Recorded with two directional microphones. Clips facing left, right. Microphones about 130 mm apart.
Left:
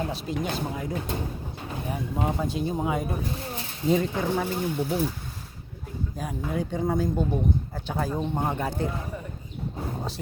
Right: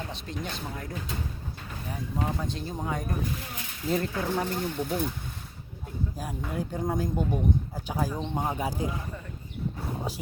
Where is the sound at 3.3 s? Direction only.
30° left (ahead or behind).